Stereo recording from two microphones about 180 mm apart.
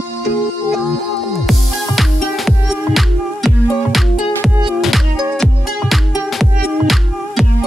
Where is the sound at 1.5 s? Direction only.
Centre (ahead or behind).